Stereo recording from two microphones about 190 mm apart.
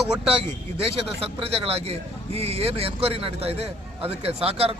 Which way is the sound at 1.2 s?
30° right (ahead or behind).